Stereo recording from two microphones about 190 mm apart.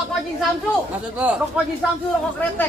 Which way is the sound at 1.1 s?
5° right (ahead or behind).